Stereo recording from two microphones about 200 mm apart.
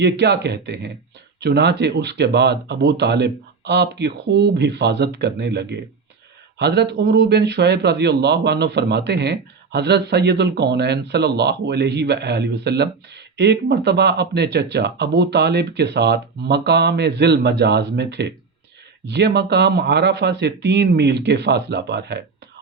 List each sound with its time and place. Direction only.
0.0 s speech: 60° right (ahead or behind)